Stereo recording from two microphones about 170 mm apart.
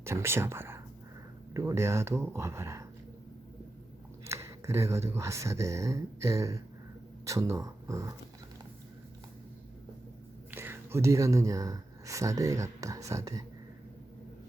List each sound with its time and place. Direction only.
0.0 s speech: 15° right (ahead or behind)
4.3 s speech: 15° right (ahead or behind)
10.5 s speech: 15° right (ahead or behind)